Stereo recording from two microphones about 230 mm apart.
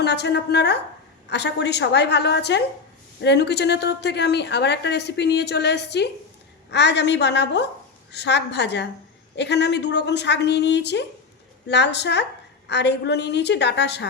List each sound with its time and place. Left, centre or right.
0.0 s a woman's voice: left